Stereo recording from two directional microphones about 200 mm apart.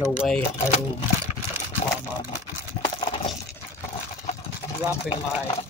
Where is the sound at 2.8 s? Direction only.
25° left (ahead or behind).